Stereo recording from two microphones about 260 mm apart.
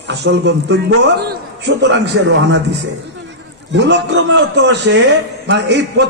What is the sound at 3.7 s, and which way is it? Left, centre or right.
A man's voice, right.